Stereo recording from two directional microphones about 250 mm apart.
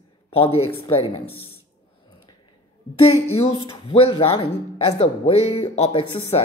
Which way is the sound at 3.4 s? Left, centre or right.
Left.